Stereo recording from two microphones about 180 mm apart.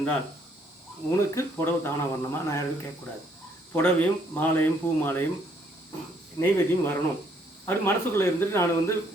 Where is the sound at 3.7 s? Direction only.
10° left (ahead or behind).